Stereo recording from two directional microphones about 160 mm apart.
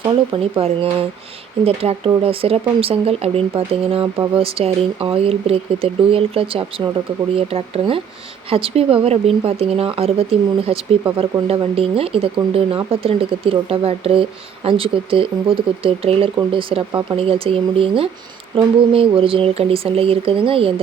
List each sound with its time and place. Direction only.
0.5 s speech: 35° right (ahead or behind)